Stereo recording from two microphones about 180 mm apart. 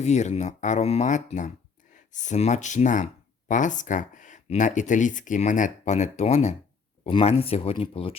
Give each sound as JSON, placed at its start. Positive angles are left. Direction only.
{"t": 0.0, "sound": "speech", "side_deg": 40}